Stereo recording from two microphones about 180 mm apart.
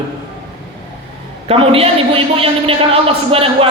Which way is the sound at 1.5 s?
35° right (ahead or behind).